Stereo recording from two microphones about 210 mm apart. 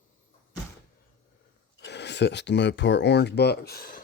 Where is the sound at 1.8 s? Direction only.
55° left (ahead or behind).